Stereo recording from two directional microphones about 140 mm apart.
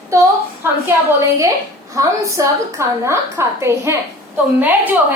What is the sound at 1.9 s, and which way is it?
A woman's voice, 20° right (ahead or behind).